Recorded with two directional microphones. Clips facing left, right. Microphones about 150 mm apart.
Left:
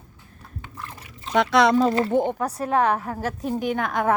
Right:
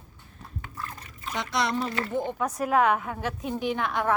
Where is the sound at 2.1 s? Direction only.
60° left (ahead or behind).